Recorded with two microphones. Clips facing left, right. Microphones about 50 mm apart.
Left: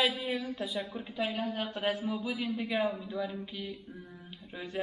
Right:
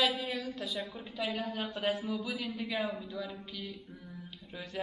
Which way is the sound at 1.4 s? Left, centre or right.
Left.